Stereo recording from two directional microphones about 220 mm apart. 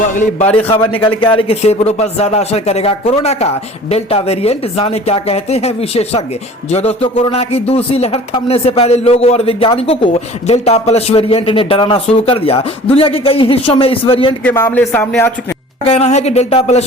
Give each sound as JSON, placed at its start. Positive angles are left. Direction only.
{"t": 0.0, "sound": "a man's voice", "side_deg": 35}
{"t": 14.4, "sound": "speech", "side_deg": 10}
{"t": 15.8, "sound": "speech", "side_deg": 30}